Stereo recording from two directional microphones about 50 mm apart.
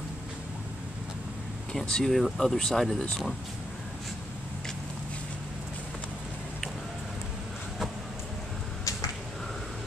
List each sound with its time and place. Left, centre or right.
1.7 s speech: centre